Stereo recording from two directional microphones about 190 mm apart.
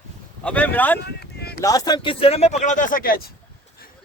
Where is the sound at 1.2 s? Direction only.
60° left (ahead or behind).